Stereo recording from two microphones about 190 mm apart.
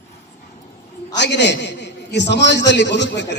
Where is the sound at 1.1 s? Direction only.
65° left (ahead or behind).